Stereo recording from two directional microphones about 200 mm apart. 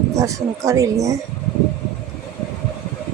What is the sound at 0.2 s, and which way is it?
Speech, 15° right (ahead or behind).